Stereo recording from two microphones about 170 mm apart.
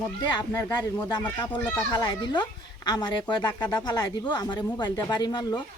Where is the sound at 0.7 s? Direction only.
25° left (ahead or behind).